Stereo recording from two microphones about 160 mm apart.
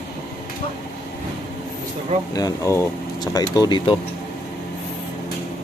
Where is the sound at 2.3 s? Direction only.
20° left (ahead or behind).